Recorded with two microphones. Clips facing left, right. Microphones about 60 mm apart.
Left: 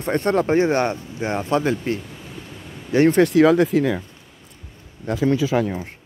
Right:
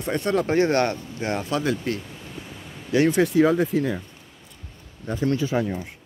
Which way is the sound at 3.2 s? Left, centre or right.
Left.